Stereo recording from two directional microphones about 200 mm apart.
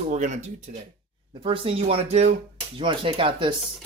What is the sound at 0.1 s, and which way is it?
Speech, 40° right (ahead or behind).